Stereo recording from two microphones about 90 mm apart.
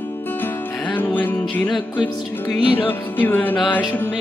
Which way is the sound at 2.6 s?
75° left (ahead or behind).